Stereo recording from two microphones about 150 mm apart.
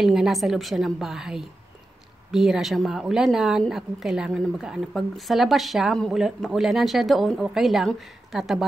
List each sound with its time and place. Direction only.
0.0 s a woman's voice: centre (ahead or behind)